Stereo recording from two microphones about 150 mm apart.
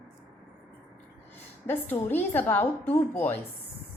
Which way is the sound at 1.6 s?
15° left (ahead or behind).